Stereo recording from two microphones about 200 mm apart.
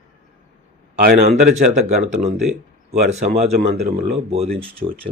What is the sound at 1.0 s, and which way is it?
Speech, 55° right (ahead or behind).